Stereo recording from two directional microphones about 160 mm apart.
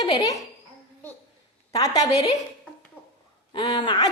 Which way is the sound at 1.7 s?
20° left (ahead or behind).